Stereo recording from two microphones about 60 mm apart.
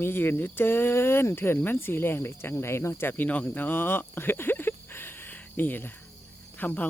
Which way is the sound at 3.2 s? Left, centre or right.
Left.